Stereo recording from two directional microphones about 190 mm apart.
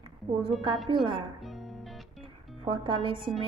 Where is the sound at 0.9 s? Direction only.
25° right (ahead or behind).